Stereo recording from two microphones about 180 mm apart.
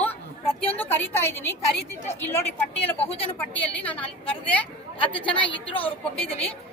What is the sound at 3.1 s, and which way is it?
Speech, 35° left (ahead or behind).